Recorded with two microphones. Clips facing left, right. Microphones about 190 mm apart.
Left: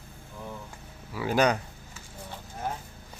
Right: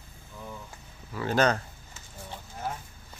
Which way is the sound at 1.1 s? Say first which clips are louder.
Left 1 dB; 10° left (ahead or behind).